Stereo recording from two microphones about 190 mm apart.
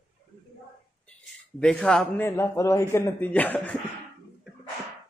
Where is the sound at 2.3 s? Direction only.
15° left (ahead or behind).